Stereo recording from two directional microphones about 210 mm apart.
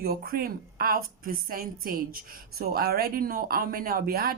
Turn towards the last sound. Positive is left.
turn(degrees=-45)  # may be behind; listen again after turning